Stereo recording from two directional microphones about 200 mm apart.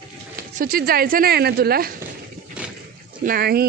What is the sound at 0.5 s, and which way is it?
Speech, 45° right (ahead or behind).